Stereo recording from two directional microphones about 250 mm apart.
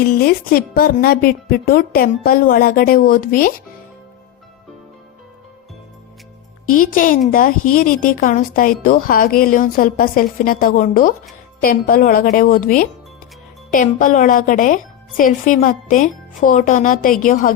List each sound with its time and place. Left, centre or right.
0.0 s speech: left
6.7 s speech: left